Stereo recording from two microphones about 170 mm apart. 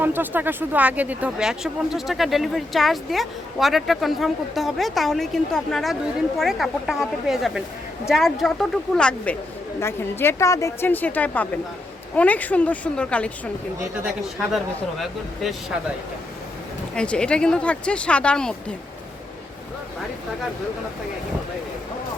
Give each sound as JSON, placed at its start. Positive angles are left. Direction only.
{"t": 0.0, "sound": "speech", "side_deg": -10}
{"t": 14.5, "sound": "speech", "side_deg": 0}
{"t": 16.9, "sound": "speech", "side_deg": 5}